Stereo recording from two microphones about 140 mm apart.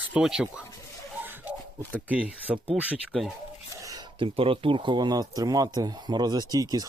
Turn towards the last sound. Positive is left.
turn(degrees=-25)  # may be behind; listen again after turning